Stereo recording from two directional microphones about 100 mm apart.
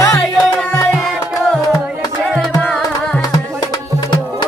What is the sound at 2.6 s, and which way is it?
Tabla, 15° left (ahead or behind).